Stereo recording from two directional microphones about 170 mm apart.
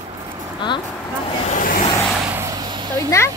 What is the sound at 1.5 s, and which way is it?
Vehicle, 55° left (ahead or behind).